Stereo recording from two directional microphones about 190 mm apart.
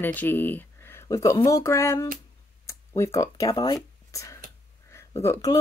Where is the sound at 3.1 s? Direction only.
20° left (ahead or behind).